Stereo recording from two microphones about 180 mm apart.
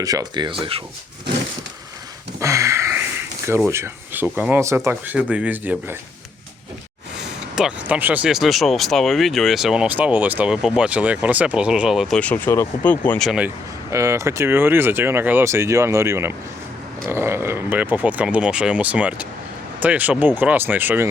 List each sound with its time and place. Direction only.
0.0 s speech: 20° right (ahead or behind)
2.4 s a sound: 15° right (ahead or behind)
3.7 s speech: 15° right (ahead or behind)
7.5 s speech: 5° right (ahead or behind)
12.2 s speech: 10° left (ahead or behind)
13.9 s speech: 15° right (ahead or behind)